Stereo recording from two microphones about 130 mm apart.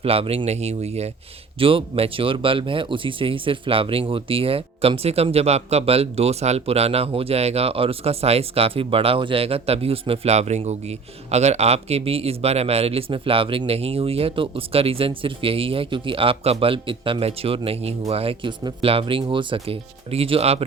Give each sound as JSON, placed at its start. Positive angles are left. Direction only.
{"t": 0.0, "sound": "speech", "side_deg": -50}
{"t": 1.5, "sound": "speech", "side_deg": -45}